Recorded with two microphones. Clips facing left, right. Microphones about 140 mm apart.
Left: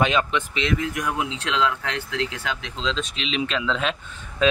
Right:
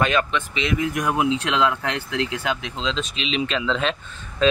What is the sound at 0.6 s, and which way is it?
Speech, 5° right (ahead or behind).